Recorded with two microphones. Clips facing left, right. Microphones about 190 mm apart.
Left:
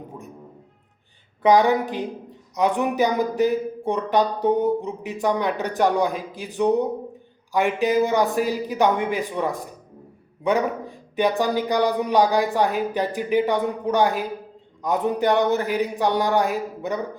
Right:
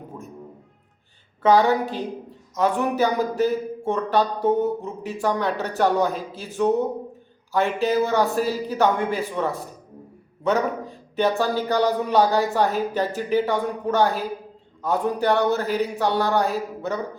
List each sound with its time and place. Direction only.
1.4 s speech: 15° left (ahead or behind)